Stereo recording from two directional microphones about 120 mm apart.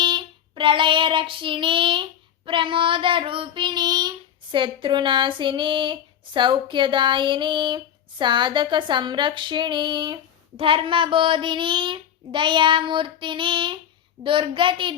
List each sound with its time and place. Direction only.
0.0 s child singing: 40° right (ahead or behind)
2.5 s female singing: 45° right (ahead or behind)
8.2 s speech: 40° right (ahead or behind)
10.6 s female singing: 45° right (ahead or behind)